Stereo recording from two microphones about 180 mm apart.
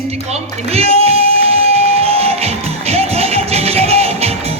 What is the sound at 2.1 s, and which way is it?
Music, 35° right (ahead or behind).